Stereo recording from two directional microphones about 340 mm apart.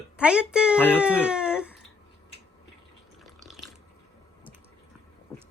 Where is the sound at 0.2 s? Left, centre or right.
Centre.